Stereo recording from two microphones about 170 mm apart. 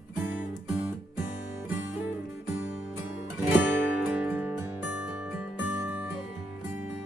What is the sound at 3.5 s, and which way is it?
Music, 10° right (ahead or behind).